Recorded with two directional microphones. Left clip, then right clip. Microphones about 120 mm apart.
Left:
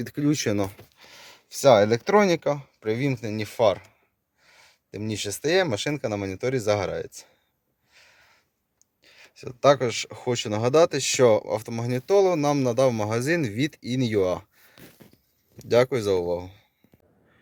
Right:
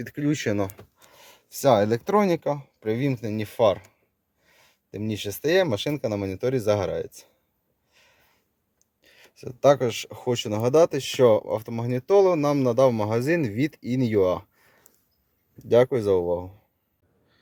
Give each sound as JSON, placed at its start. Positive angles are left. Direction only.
{"t": 0.3, "sound": "speech", "side_deg": 10}
{"t": 1.1, "sound": "speech", "side_deg": -15}
{"t": 7.9, "sound": "a sound", "side_deg": -25}
{"t": 9.0, "sound": "speech", "side_deg": -30}
{"t": 15.7, "sound": "speech", "side_deg": -25}